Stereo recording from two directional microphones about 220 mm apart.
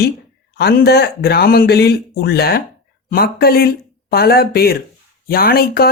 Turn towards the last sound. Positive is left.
turn(degrees=45)  # may be behind; listen again after turning